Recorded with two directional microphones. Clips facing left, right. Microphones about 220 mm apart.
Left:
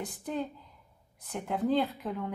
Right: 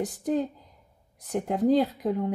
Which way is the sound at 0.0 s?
40° right (ahead or behind).